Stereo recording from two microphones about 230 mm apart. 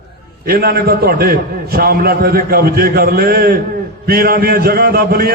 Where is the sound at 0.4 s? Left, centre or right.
Right.